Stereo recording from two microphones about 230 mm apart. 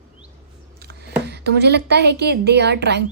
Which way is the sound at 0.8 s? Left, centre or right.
Right.